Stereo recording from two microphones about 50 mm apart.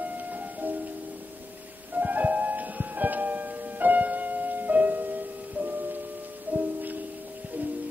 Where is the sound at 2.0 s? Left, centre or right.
Right.